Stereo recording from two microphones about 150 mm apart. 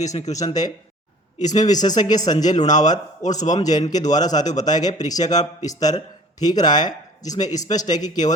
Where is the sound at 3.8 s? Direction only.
55° left (ahead or behind).